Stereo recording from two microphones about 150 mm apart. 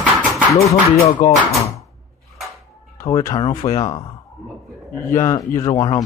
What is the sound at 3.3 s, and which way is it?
A man's voice, 35° left (ahead or behind).